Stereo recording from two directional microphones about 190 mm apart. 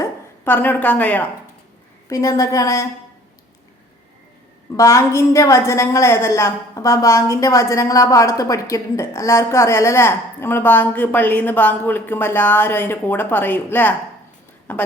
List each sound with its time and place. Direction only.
0.0 s a woman's voice: 10° left (ahead or behind)
4.8 s a woman's voice: 15° left (ahead or behind)